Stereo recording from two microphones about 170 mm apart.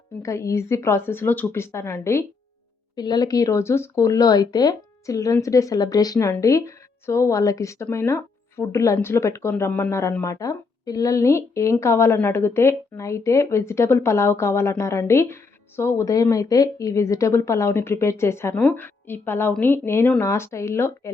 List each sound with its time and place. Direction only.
0.2 s speech: 15° left (ahead or behind)
2.9 s speech: 25° left (ahead or behind)